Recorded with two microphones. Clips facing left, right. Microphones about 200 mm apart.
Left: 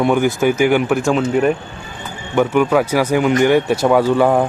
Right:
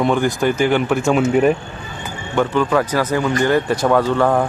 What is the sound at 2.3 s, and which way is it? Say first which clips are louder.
Speech: left 3 dB; 15° left (ahead or behind).